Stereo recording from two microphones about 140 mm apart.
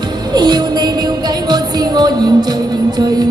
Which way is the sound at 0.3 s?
30° right (ahead or behind).